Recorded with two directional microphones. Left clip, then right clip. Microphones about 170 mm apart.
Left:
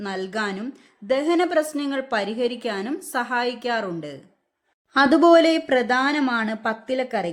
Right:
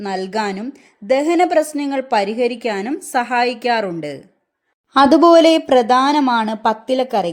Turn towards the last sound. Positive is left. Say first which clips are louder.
# right 7 dB
turn(degrees=-20)  # may be behind; listen again after turning